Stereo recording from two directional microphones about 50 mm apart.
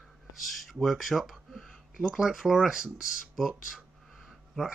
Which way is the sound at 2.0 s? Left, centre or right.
Centre.